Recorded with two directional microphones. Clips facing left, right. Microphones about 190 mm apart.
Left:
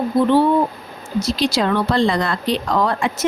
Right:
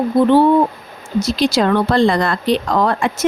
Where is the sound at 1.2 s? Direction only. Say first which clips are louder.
Right 3 dB; 50° right (ahead or behind).